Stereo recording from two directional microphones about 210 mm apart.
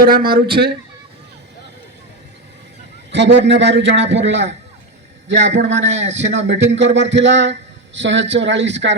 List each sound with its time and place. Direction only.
0.0 s a man's voice: 45° right (ahead or behind)
3.1 s a man's voice: 55° right (ahead or behind)